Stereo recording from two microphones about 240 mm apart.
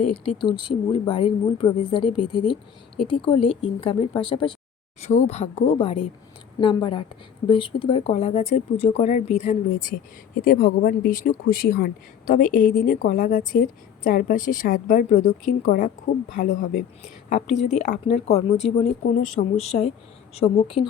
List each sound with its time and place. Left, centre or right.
0.1 s speech: left